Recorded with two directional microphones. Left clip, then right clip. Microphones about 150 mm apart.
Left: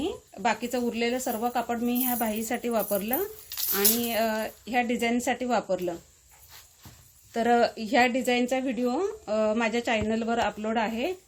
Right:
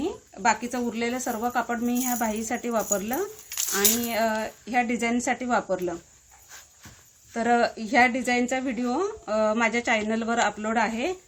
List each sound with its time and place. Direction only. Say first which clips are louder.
0.0 s a woman's voice: right 3 dB; 25° left (ahead or behind)
7.3 s a woman's voice: even; 25° left (ahead or behind)